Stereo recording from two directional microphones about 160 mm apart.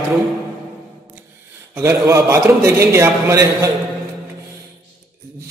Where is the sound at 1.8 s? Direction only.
20° right (ahead or behind).